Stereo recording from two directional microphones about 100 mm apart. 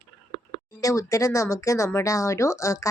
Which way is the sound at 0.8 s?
35° left (ahead or behind).